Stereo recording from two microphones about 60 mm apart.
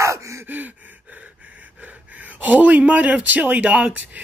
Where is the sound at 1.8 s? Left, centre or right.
Right.